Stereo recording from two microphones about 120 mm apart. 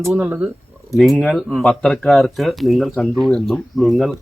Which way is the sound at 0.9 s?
Centre (ahead or behind).